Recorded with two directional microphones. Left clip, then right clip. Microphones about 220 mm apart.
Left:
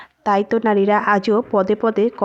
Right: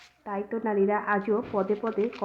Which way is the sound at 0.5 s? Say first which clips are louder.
Left 5 dB; 60° left (ahead or behind).